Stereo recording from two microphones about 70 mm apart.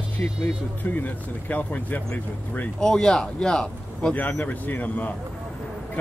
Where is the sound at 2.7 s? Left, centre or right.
Centre.